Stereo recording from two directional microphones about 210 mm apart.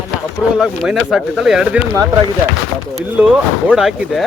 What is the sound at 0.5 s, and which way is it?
Speech, centre (ahead or behind).